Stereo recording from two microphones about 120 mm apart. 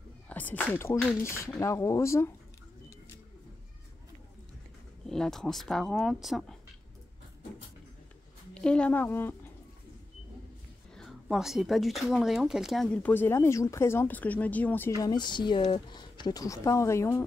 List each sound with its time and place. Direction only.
0.3 s speech: 15° left (ahead or behind)
5.0 s speech: 5° left (ahead or behind)
8.5 s speech: 10° left (ahead or behind)
11.0 s speech: 5° right (ahead or behind); by 14.9 s 15° left (ahead or behind)
15.0 s speech: 35° left (ahead or behind)